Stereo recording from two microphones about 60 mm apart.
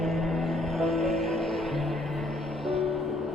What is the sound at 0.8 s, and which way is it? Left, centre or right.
Music, centre.